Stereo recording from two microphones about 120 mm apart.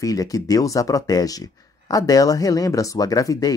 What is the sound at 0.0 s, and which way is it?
Speech, 30° left (ahead or behind).